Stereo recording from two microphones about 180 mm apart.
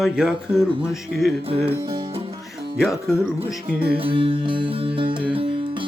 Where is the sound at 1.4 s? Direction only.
35° right (ahead or behind).